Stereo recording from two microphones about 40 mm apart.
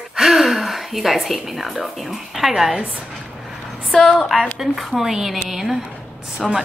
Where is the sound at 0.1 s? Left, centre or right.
Centre.